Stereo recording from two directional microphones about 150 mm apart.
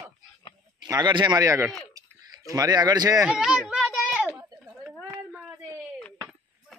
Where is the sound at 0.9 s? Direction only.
30° right (ahead or behind).